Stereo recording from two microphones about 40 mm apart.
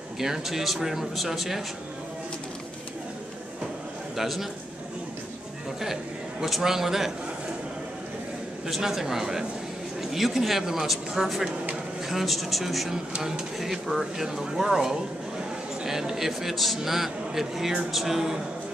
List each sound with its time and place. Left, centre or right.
0.2 s a man's voice: centre
4.2 s a man's voice: centre
6.4 s a man's voice: centre
8.6 s a man's voice: centre